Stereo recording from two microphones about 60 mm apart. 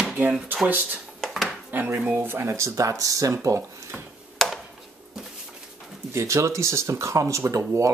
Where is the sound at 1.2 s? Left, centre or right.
Centre.